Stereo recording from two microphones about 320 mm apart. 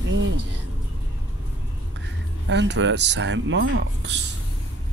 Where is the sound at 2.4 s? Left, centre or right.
Right.